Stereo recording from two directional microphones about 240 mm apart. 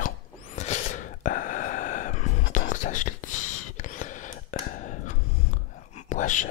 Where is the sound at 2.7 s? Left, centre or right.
Left.